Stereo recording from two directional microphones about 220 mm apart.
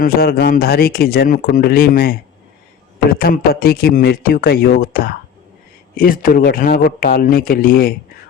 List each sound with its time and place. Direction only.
0.0 s speech: 45° left (ahead or behind)